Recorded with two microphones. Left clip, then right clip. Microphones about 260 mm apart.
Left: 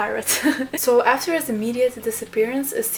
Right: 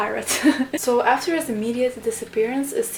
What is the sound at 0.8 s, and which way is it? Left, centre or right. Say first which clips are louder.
Speech: left 2 dB; left.